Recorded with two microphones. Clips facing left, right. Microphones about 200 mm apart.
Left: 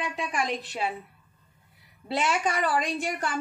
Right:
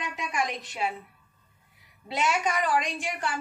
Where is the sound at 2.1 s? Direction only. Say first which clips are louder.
Left 1 dB; 35° left (ahead or behind).